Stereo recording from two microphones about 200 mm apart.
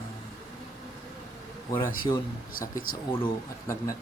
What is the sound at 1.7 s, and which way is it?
Speech, 10° left (ahead or behind).